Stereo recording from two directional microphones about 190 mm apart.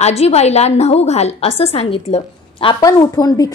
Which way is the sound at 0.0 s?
35° left (ahead or behind).